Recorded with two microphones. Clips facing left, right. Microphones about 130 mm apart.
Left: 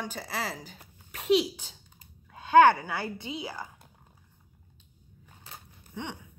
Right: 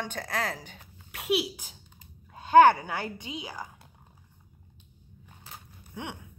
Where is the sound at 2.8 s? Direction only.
20° right (ahead or behind).